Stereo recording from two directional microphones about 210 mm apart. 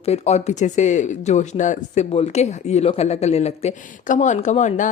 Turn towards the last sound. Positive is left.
turn(degrees=35)  # may be behind; listen again after turning